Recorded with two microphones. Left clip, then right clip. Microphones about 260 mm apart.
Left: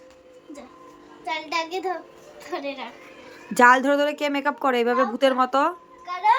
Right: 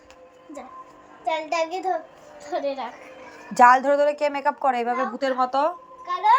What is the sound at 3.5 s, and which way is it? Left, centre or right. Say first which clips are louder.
A woman's voice: right 1 dB; centre.